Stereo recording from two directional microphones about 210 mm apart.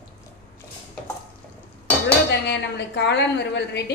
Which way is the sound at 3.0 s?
55° left (ahead or behind).